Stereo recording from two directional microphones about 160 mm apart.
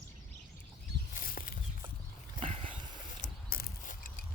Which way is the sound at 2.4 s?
40° right (ahead or behind).